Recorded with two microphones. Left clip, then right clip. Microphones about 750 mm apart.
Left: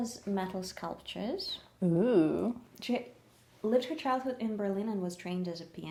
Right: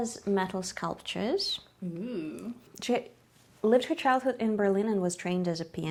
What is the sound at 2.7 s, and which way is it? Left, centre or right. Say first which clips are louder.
A woman's voice: right 9 dB; right.